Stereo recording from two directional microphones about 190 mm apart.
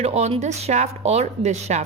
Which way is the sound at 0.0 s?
35° right (ahead or behind).